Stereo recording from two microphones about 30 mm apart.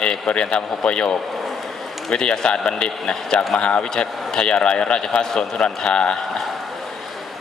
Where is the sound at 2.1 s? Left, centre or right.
Left.